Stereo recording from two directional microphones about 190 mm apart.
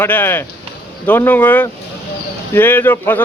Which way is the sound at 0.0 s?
10° left (ahead or behind).